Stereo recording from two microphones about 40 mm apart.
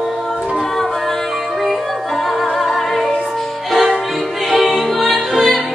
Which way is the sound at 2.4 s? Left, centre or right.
Centre.